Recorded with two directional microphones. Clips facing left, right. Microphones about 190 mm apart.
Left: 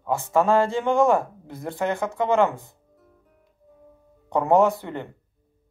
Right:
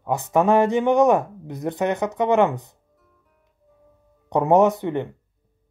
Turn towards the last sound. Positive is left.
turn(degrees=-20)  # may be behind; listen again after turning